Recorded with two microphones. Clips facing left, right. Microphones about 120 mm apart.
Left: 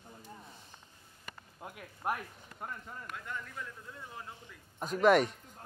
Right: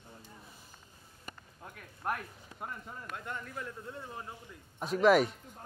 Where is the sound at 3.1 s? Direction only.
40° right (ahead or behind).